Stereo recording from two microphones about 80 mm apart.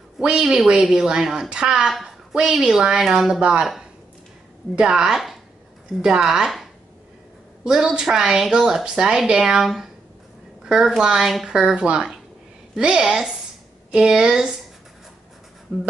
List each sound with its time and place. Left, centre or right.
0.2 s a woman's voice: centre
4.7 s a woman's voice: centre